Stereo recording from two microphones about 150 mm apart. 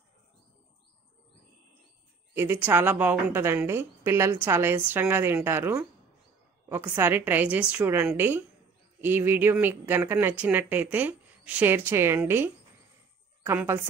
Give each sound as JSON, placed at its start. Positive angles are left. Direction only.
{"t": 2.3, "sound": "a woman's voice", "side_deg": -15}